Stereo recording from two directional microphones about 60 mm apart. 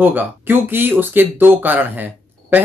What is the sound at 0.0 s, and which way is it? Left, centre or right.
Speech, right.